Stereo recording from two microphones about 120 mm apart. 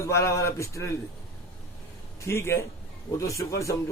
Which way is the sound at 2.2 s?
20° left (ahead or behind).